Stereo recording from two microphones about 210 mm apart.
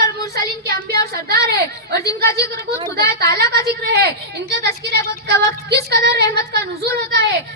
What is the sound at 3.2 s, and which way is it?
Speech, 50° right (ahead or behind).